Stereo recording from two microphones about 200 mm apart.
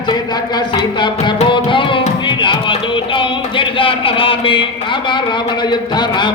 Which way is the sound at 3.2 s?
25° left (ahead or behind).